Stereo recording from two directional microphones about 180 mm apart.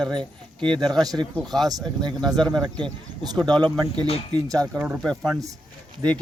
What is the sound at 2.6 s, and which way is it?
Speech, 25° right (ahead or behind).